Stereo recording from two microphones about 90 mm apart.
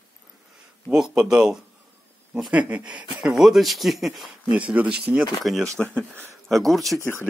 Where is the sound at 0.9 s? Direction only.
5° right (ahead or behind).